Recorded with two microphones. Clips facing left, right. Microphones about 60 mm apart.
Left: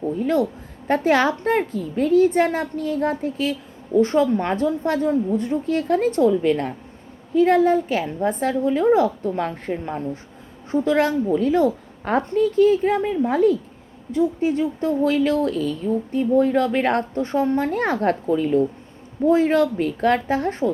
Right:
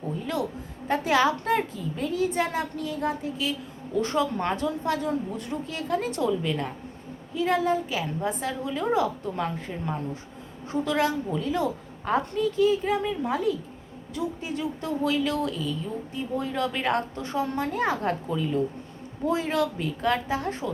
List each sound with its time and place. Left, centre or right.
0.2 s a woman's voice: left
5.6 s a woman's voice: left
14.1 s a woman's voice: left